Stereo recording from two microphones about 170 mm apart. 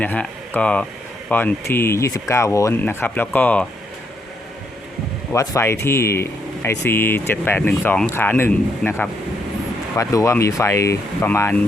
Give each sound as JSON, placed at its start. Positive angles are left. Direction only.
{"t": 0.0, "sound": "speech", "side_deg": 10}
{"t": 5.3, "sound": "speech", "side_deg": 15}